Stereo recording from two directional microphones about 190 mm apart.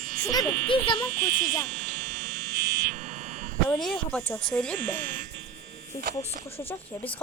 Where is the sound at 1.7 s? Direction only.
45° right (ahead or behind).